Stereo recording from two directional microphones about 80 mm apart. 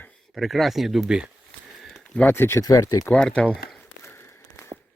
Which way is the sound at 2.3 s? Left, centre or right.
Left.